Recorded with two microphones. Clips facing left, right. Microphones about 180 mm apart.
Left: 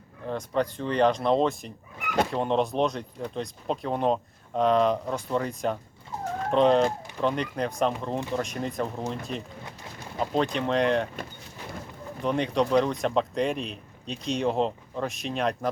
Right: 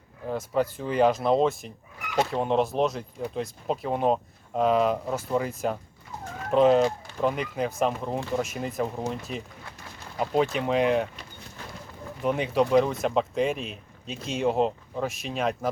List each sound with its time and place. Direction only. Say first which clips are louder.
0.3 s speech: right 1 dB; 5° right (ahead or behind)
12.2 s speech: right 1 dB; 5° right (ahead or behind)